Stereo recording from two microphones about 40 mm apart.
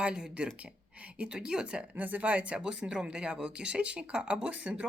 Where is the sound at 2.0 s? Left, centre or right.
Right.